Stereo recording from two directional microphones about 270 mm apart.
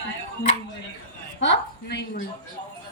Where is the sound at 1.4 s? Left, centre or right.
Left.